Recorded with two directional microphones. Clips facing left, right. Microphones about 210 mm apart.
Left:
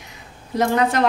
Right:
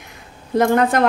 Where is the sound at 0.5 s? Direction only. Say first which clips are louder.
Right 3 dB; 55° right (ahead or behind).